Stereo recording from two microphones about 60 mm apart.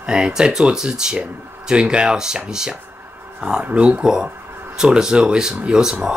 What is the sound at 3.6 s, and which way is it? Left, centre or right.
Speech, right.